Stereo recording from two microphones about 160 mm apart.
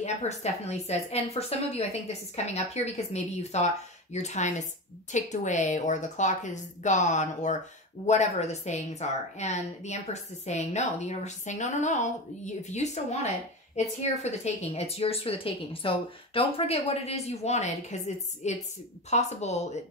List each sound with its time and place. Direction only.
0.0 s a woman's voice: 45° left (ahead or behind)